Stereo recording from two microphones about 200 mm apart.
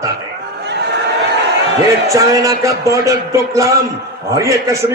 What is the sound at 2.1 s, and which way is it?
Speech, 15° right (ahead or behind).